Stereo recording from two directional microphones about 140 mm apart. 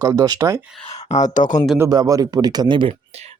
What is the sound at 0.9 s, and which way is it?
Speech, 55° left (ahead or behind).